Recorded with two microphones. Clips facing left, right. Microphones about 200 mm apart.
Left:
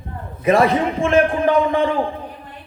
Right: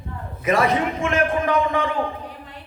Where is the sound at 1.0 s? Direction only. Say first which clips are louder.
Left 5 dB; 30° left (ahead or behind).